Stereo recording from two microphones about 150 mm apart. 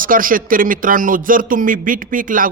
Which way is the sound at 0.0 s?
65° right (ahead or behind).